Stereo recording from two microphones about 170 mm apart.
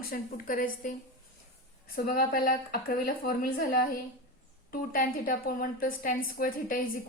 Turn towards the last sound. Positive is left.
turn(degrees=55)  # may be behind; listen again after turning